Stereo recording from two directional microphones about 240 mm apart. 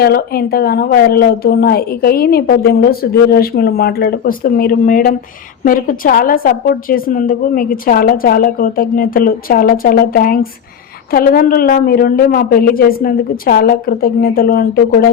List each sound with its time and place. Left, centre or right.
0.0 s a woman's voice: left